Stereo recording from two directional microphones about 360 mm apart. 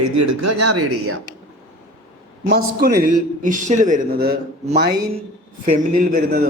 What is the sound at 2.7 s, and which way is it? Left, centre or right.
Speech, right.